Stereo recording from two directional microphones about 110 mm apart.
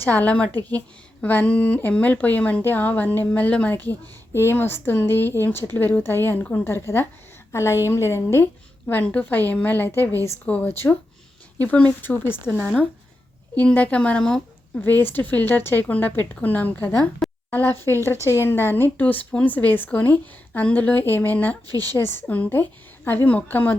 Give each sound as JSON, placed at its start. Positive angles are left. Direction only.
{"t": 0.0, "sound": "speech", "side_deg": 15}
{"t": 13.6, "sound": "speech", "side_deg": 15}
{"t": 14.8, "sound": "speech", "side_deg": 20}